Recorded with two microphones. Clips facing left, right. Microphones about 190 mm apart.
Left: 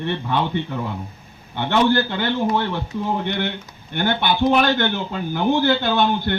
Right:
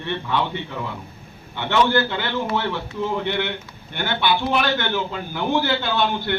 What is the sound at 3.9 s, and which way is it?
A man's voice, 50° left (ahead or behind).